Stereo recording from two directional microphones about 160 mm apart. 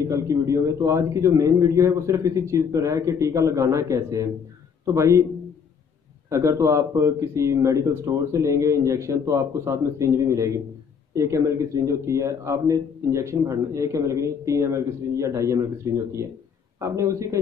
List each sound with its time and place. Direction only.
0.0 s speech: 20° right (ahead or behind)
6.2 s speech: 20° right (ahead or behind)